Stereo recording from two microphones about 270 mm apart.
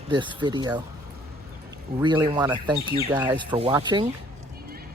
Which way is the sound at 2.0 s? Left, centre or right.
Centre.